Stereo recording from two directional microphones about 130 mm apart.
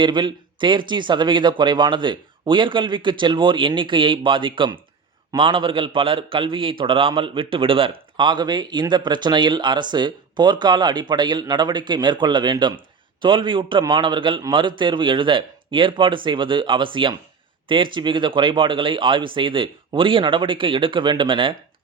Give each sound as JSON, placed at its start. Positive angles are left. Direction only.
{"t": 0.0, "sound": "a man's voice", "side_deg": -35}